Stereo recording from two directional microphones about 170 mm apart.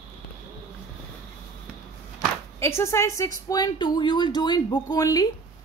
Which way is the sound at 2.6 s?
15° left (ahead or behind).